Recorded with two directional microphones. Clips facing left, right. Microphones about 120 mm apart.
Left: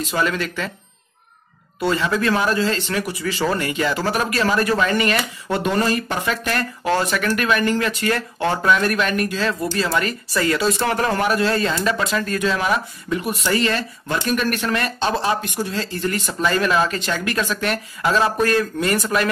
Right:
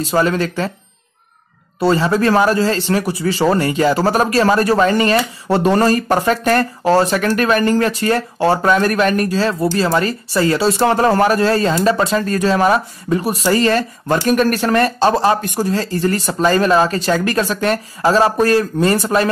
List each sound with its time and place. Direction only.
0.0 s speech: 35° right (ahead or behind)
1.8 s speech: 30° right (ahead or behind)